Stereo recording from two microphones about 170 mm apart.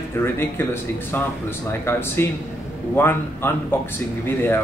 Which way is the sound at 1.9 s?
15° left (ahead or behind).